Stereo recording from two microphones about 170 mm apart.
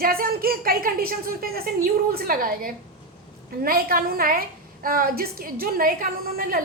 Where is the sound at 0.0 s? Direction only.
60° right (ahead or behind).